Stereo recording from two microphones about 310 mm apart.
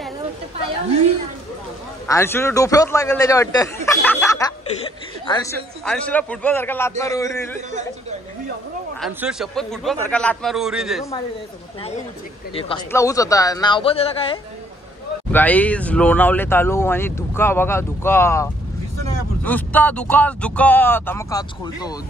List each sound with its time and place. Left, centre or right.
2.0 s a woman's voice: centre
5.9 s speech: centre
9.0 s speech: centre
12.5 s speech: centre
15.3 s speech: centre